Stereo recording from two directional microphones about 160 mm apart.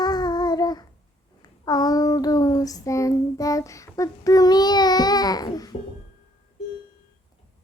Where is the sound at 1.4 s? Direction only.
25° left (ahead or behind).